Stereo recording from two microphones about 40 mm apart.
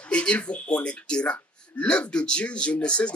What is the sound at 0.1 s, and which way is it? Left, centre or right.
Speech, left.